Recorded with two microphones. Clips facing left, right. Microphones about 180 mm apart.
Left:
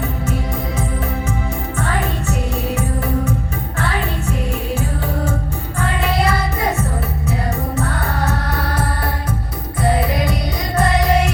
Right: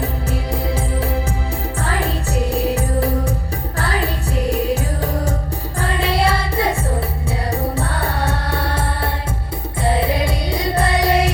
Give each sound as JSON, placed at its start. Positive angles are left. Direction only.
{"t": 1.8, "sound": "music", "side_deg": -35}
{"t": 5.8, "sound": "music", "side_deg": -30}
{"t": 7.8, "sound": "music", "side_deg": -30}
{"t": 9.8, "sound": "music", "side_deg": -30}